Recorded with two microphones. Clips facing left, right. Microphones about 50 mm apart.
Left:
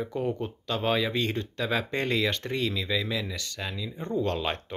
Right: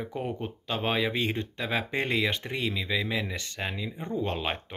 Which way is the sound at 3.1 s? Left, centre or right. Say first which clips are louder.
Right 1 dB; right.